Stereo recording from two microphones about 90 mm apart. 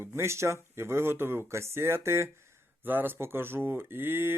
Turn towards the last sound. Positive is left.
turn(degrees=-25)  # may be behind; listen again after turning